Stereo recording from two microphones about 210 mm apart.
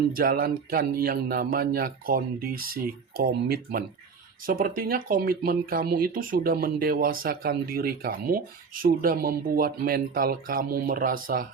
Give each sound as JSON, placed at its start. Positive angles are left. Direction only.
{"t": 0.1, "sound": "speech", "side_deg": -45}